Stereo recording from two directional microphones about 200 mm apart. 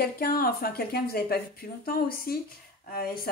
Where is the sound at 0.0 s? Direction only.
45° left (ahead or behind).